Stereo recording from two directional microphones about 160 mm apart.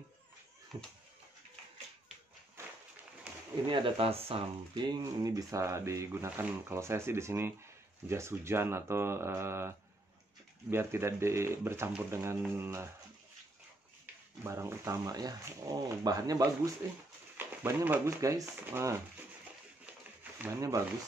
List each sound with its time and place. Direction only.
0.7 s speech: 25° right (ahead or behind)
3.6 s speech: 30° right (ahead or behind); by 12.9 s 15° right (ahead or behind)
14.4 s speech: 15° right (ahead or behind)
19.9 s a sound: 15° right (ahead or behind)